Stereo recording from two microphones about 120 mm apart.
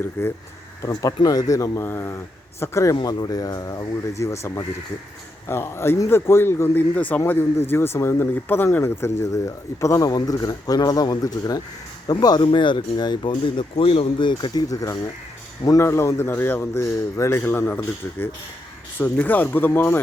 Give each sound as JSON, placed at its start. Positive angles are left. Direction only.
{"t": 0.0, "sound": "speech", "side_deg": 20}
{"t": 0.8, "sound": "speech", "side_deg": 30}
{"t": 18.9, "sound": "speech", "side_deg": 15}